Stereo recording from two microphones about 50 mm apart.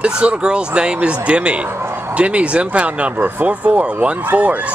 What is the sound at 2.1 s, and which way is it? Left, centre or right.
Speech, right.